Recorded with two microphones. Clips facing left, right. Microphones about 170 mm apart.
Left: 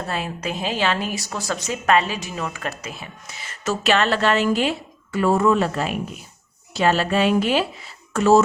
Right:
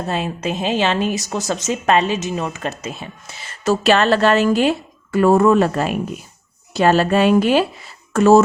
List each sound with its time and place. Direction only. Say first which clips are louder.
0.1 s a woman's voice: right 6 dB; 20° right (ahead or behind); by 8.4 s 50° right (ahead or behind)